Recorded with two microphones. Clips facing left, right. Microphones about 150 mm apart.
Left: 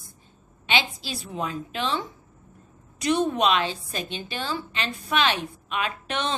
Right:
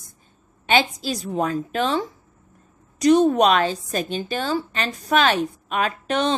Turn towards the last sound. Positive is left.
turn(degrees=-40)  # may be behind; listen again after turning